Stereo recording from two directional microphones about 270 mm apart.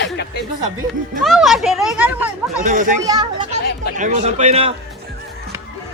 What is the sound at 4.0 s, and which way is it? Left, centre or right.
Speech, right.